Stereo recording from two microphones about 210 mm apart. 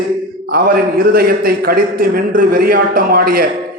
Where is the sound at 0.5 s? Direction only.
45° right (ahead or behind).